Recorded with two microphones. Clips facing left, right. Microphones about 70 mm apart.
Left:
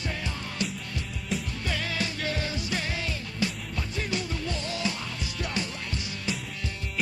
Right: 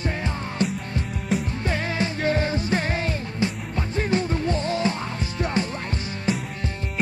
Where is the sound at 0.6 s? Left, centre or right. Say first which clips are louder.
Right 8 dB; right.